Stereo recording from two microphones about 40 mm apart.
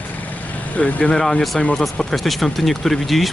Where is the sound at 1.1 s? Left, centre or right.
Left.